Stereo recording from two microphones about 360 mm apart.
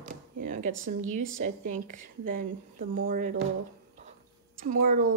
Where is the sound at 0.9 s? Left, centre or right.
Right.